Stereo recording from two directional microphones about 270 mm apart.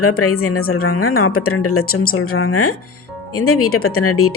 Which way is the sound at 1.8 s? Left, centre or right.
Left.